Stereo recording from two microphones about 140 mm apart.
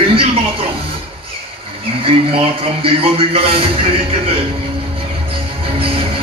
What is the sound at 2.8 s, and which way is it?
Speech, 40° right (ahead or behind).